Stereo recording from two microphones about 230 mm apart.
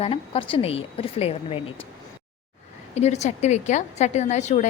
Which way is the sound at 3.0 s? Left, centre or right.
Left.